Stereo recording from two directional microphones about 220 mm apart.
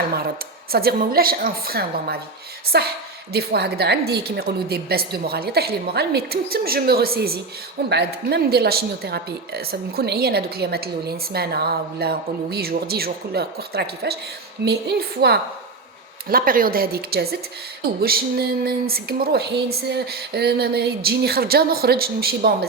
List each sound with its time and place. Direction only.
0.7 s a woman's voice: 45° right (ahead or behind)